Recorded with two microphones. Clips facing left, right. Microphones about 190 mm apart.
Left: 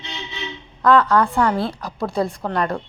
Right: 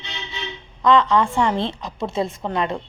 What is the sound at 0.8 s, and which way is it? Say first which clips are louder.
A woman's voice: left 1 dB; 5° left (ahead or behind).